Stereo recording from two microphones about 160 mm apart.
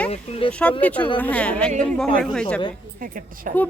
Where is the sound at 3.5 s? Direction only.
60° right (ahead or behind).